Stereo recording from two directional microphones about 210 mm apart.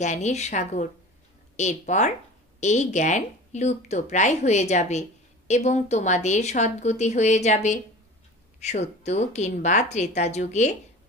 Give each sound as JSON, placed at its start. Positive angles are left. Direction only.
{"t": 0.0, "sound": "a woman's voice", "side_deg": 35}